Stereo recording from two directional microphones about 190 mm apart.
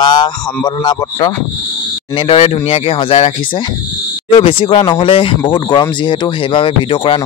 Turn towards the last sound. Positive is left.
turn(degrees=25)  # may be behind; listen again after turning